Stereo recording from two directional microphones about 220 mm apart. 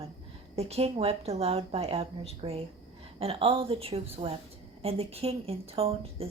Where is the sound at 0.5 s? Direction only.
30° right (ahead or behind).